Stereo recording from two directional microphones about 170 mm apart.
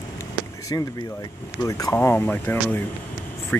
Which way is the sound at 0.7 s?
20° left (ahead or behind).